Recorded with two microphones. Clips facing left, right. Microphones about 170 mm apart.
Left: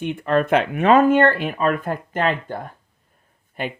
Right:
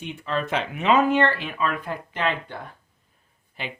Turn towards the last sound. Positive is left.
turn(degrees=50)  # may be behind; listen again after turning